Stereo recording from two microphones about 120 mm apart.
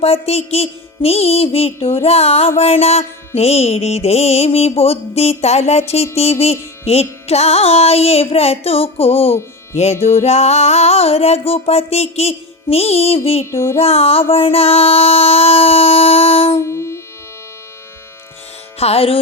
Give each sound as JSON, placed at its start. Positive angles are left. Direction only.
{"t": 0.0, "sound": "carnatic music", "side_deg": 60}
{"t": 13.4, "sound": "music", "side_deg": 20}
{"t": 13.7, "sound": "carnatic music", "side_deg": 55}
{"t": 16.6, "sound": "music", "side_deg": 25}
{"t": 18.8, "sound": "carnatic music", "side_deg": 55}